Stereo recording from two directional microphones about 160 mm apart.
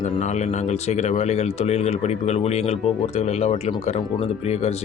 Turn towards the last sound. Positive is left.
turn(degrees=40)  # may be behind; listen again after turning